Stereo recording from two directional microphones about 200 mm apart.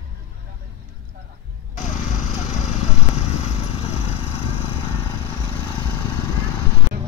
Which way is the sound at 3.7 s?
30° left (ahead or behind).